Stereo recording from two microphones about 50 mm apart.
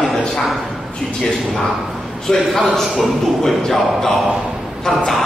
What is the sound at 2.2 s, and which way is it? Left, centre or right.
A man's voice, centre.